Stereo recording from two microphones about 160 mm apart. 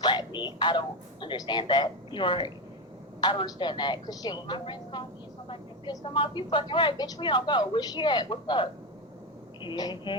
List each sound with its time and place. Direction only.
0.0 s speech: 25° left (ahead or behind)
5.5 s vehicle: 25° left (ahead or behind)
6.1 s a woman's voice: 30° left (ahead or behind)